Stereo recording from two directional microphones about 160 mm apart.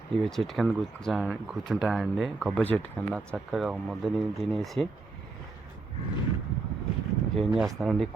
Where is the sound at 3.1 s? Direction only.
Centre (ahead or behind).